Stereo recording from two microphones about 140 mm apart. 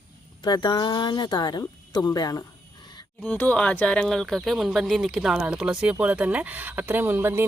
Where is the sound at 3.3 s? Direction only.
10° left (ahead or behind).